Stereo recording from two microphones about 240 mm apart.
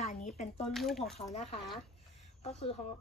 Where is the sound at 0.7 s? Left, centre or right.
Centre.